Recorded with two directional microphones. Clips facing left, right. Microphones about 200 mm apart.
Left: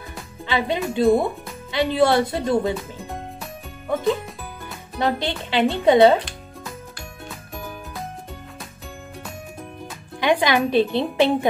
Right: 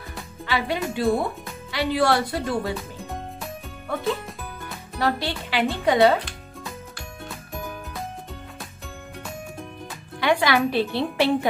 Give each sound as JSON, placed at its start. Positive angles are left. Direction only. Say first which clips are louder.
{"t": 0.5, "sound": "a woman's voice", "louder": "left 3 dB", "side_deg": 20}
{"t": 3.0, "sound": "music", "louder": "left 1 dB", "side_deg": 0}
{"t": 3.9, "sound": "a woman's voice", "louder": "left 5 dB", "side_deg": 20}
{"t": 7.2, "sound": "music", "louder": "right 1 dB", "side_deg": 0}
{"t": 10.2, "sound": "a woman's voice", "louder": "left 2 dB", "side_deg": 20}